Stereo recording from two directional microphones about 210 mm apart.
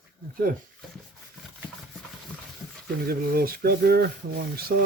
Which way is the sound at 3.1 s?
45° right (ahead or behind).